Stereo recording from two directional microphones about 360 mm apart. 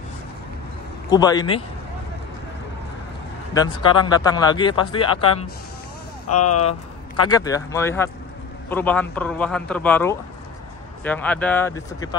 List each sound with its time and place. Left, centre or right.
1.1 s speech: centre
3.8 s speech: centre
6.2 s speech: left
6.6 s a man's voice: centre